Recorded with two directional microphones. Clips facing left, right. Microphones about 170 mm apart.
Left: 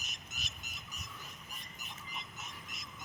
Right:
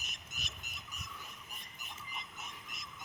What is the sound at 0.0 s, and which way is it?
Frog, 55° right (ahead or behind).